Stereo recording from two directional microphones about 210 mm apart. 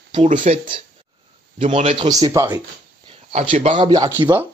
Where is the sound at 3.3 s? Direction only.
30° right (ahead or behind).